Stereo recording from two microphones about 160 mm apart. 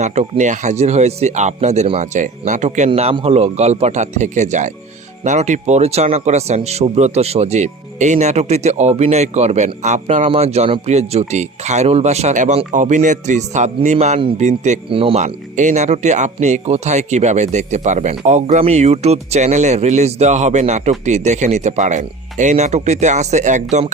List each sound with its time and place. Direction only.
0.0 s a man's voice: 45° right (ahead or behind)